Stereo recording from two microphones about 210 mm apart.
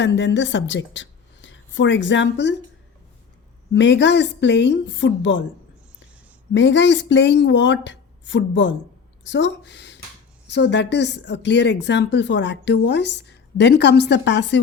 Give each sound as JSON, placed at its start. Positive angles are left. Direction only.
{"t": 0.0, "sound": "a woman's voice", "side_deg": 55}
{"t": 3.7, "sound": "speech", "side_deg": 60}
{"t": 6.5, "sound": "speech", "side_deg": 60}